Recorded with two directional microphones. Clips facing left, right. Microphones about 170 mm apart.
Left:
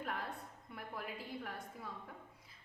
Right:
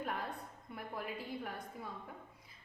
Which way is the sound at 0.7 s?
25° right (ahead or behind).